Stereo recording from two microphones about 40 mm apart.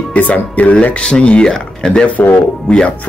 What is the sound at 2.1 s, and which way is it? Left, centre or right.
Speech, left.